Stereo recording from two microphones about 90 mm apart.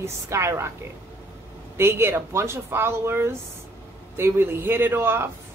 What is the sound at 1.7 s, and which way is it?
A woman's voice, 25° right (ahead or behind).